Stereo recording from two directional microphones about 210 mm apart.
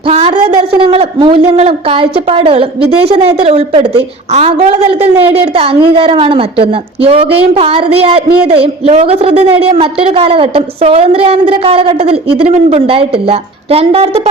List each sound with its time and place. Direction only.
0.1 s a woman's voice: 25° right (ahead or behind)